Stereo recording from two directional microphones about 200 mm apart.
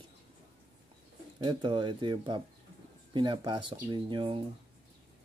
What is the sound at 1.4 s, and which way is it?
Speech, 20° right (ahead or behind).